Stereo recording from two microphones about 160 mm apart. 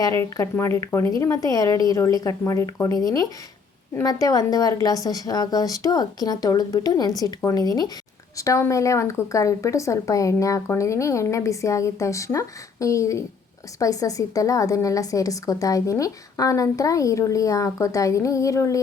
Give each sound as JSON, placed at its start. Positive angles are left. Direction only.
{"t": 0.0, "sound": "a woman's voice", "side_deg": 20}